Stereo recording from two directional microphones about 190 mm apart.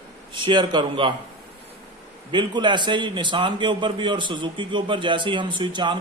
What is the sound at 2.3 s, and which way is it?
A man's voice, 25° right (ahead or behind).